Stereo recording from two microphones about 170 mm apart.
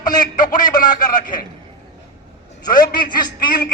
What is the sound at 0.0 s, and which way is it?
Speech, 25° left (ahead or behind).